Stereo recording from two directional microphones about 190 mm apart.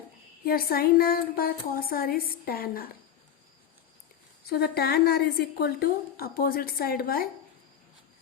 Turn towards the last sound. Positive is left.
turn(degrees=50)  # may be behind; listen again after turning